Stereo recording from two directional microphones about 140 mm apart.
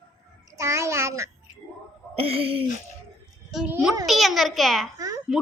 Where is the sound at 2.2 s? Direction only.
40° right (ahead or behind).